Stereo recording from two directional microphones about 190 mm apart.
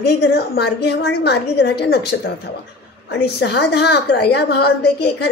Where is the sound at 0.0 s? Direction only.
60° left (ahead or behind).